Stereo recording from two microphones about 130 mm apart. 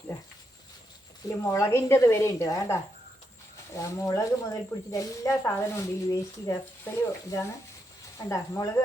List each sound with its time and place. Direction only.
1.5 s speech: 20° left (ahead or behind)